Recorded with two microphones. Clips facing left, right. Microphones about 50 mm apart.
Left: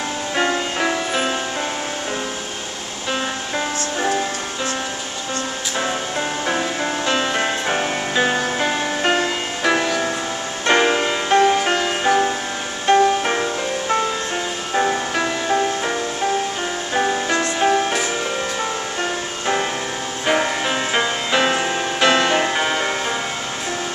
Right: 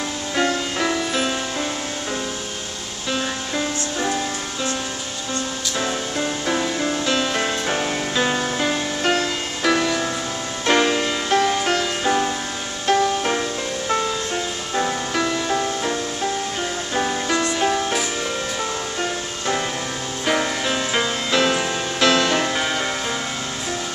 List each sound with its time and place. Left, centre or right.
0.4 s music: centre
3.1 s music: centre
5.8 s music: centre
17.3 s music: left